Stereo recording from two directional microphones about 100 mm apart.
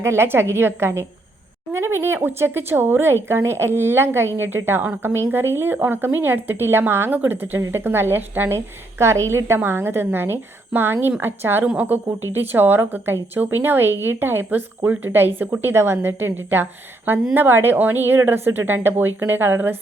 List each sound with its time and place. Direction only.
0.0 s speech: 25° right (ahead or behind)